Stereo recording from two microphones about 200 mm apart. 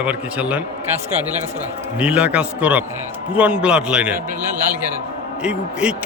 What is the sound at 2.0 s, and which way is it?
A man's voice, 5° right (ahead or behind).